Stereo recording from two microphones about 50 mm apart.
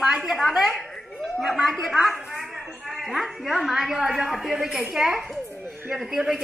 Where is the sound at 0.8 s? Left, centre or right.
Centre.